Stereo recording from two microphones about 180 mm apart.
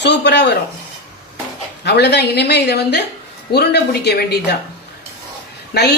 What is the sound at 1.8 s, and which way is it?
A woman's voice, 70° left (ahead or behind).